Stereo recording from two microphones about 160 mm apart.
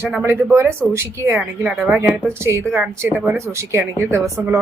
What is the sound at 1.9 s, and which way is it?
Speech, 15° right (ahead or behind).